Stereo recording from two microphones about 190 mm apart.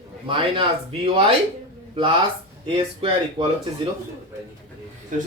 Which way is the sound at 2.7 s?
25° right (ahead or behind).